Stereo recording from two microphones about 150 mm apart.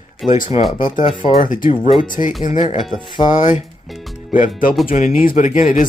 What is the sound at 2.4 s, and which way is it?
Speech, 50° left (ahead or behind).